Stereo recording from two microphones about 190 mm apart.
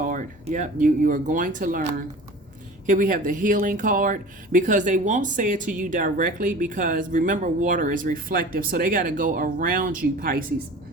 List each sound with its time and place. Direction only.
0.0 s speech: 45° right (ahead or behind)